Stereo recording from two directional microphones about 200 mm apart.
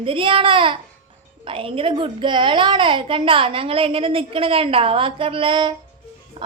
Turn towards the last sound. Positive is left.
turn(degrees=-25)  # may be behind; listen again after turning